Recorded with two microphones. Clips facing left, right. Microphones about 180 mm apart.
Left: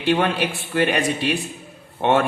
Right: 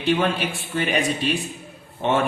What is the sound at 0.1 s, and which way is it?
A woman's voice, 60° left (ahead or behind).